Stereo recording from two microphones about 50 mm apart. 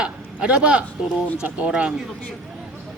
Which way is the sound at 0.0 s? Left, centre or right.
Right.